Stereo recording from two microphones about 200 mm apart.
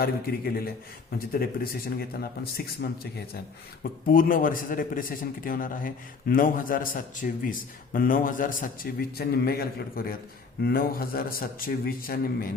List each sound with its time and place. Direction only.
0.0 s a man's voice: 50° left (ahead or behind)